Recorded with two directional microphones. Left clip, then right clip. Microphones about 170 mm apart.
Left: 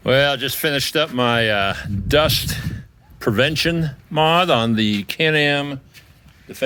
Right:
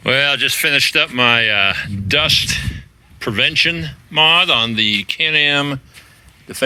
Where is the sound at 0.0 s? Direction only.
15° left (ahead or behind); by 5.4 s 45° left (ahead or behind).